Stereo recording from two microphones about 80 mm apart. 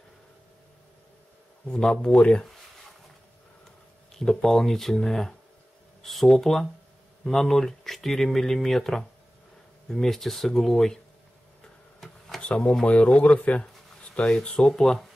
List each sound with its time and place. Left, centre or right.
1.7 s speech: centre
4.1 s speech: centre
12.4 s speech: centre